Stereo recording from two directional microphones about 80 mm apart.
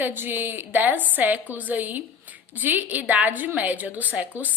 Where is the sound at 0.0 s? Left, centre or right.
Right.